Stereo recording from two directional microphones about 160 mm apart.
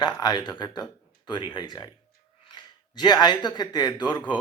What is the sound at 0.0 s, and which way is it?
Speech, 25° left (ahead or behind).